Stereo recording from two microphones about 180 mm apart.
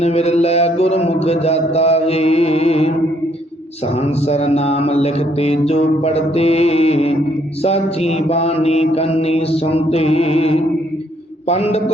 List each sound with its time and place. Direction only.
0.0 s mantra: 35° left (ahead or behind)
4.3 s mantra: 35° left (ahead or behind)